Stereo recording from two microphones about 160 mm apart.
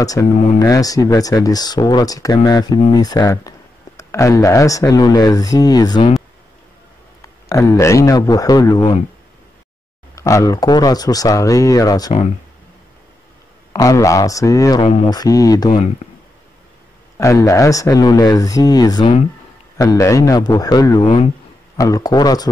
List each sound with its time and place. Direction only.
0.0 s speech: 20° left (ahead or behind)
7.2 s a man's voice: 20° left (ahead or behind)
10.1 s speech: 20° left (ahead or behind)
13.7 s speech: 20° left (ahead or behind)
17.2 s speech: 20° left (ahead or behind)